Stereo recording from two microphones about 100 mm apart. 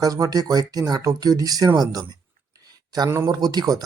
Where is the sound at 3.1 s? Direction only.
30° right (ahead or behind).